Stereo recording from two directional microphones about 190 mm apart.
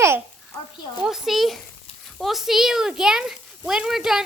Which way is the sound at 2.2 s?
Centre (ahead or behind).